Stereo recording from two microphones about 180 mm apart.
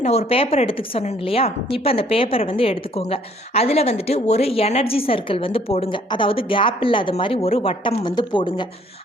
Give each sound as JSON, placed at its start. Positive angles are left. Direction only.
{"t": 0.0, "sound": "a woman's voice", "side_deg": 35}